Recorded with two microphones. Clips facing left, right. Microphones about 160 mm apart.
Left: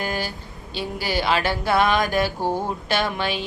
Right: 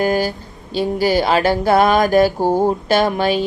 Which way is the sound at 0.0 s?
40° right (ahead or behind).